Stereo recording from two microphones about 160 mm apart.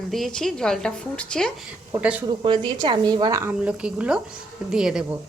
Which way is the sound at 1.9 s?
10° right (ahead or behind).